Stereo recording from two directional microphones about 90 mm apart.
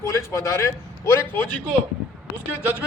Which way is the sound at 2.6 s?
20° right (ahead or behind).